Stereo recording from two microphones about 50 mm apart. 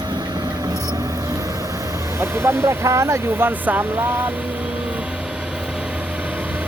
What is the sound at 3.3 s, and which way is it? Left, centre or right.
Speech, right.